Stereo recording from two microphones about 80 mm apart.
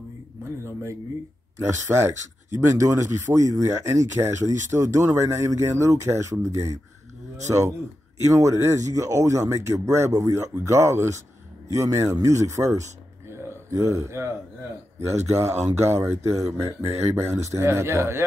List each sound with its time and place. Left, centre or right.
2.0 s speech: right
8.3 s speech: right